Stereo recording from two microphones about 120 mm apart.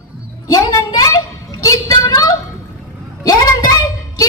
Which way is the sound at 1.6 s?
30° left (ahead or behind).